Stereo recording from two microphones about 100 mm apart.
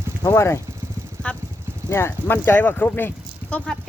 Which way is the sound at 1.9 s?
25° left (ahead or behind).